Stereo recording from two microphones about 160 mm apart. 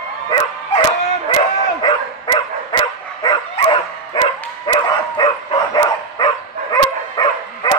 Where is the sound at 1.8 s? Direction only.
30° left (ahead or behind).